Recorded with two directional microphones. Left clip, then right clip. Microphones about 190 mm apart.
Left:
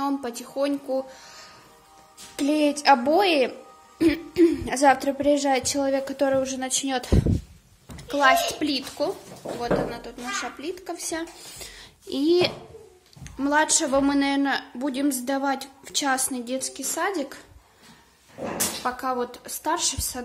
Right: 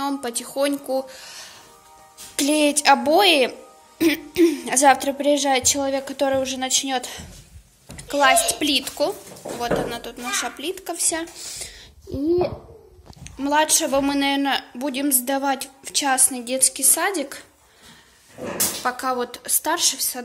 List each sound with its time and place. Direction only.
0.0 s a woman's voice: 10° left (ahead or behind)
7.9 s a woman's voice: 10° left (ahead or behind)
11.6 s a sound: 20° left (ahead or behind)
13.2 s a woman's voice: 20° left (ahead or behind)
18.8 s a woman's voice: 5° left (ahead or behind)